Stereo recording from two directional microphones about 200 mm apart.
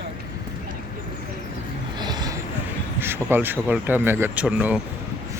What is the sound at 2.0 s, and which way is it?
Vehicle, 20° right (ahead or behind).